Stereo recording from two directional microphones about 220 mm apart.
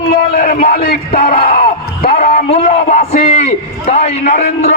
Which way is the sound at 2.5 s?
30° left (ahead or behind).